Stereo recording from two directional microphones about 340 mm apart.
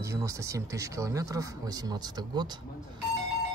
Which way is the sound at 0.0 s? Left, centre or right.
Centre.